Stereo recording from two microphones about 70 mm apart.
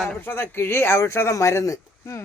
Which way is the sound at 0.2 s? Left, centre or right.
Left.